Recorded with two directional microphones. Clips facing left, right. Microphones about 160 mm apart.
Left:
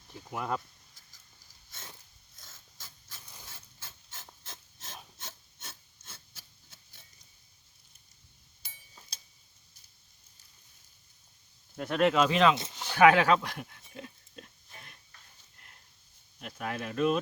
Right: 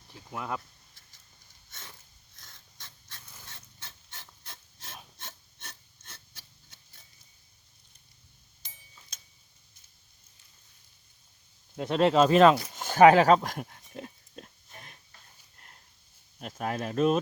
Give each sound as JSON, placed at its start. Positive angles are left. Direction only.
{"t": 0.3, "sound": "speech", "side_deg": 0}
{"t": 2.3, "sound": "snort", "side_deg": 0}
{"t": 3.4, "sound": "filing", "side_deg": 5}
{"t": 4.9, "sound": "a sound", "side_deg": 5}
{"t": 9.1, "sound": "tick-tock", "side_deg": 35}
{"t": 11.8, "sound": "speech", "side_deg": -25}
{"t": 12.7, "sound": "pig", "side_deg": -45}
{"t": 16.4, "sound": "speech", "side_deg": -45}